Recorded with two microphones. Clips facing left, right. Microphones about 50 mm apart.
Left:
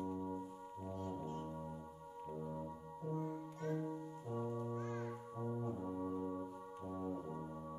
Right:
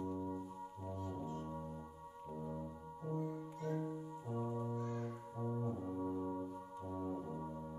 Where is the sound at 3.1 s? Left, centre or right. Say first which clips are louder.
Right 1 dB; left.